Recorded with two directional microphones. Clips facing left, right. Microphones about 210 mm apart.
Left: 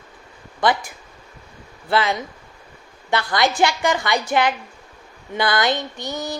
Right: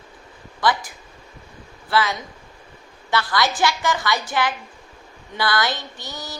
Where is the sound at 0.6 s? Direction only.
25° left (ahead or behind).